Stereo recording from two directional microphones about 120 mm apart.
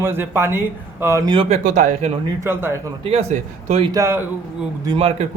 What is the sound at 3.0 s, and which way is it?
Speech, 55° right (ahead or behind).